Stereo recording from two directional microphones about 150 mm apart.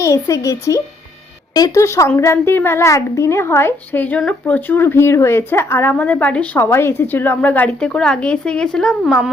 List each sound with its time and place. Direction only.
0.0 s a child's voice: 20° left (ahead or behind); by 9.3 s centre (ahead or behind)